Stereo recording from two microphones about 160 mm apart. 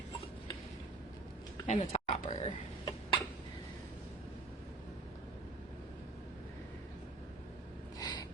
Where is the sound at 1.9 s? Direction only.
40° left (ahead or behind).